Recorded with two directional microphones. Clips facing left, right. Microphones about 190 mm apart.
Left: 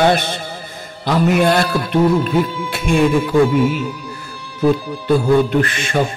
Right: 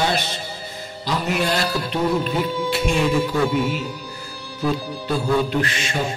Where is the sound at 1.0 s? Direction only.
55° left (ahead or behind).